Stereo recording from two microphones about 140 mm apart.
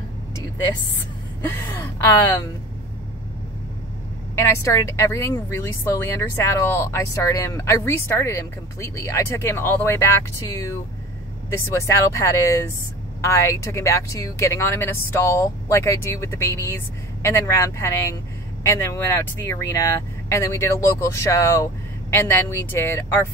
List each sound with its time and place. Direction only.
1.4 s speech: 15° left (ahead or behind)
4.4 s speech: 20° left (ahead or behind)